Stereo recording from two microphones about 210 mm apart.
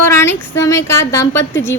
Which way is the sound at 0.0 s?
10° left (ahead or behind).